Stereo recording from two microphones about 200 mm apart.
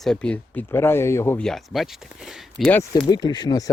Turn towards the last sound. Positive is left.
turn(degrees=20)  # may be behind; listen again after turning